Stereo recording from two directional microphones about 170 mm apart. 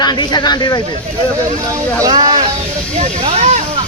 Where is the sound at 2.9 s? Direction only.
45° right (ahead or behind).